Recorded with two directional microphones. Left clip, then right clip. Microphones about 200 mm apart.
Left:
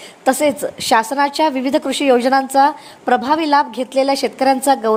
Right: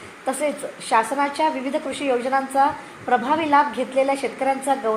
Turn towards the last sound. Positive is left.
turn(degrees=60)  # may be behind; listen again after turning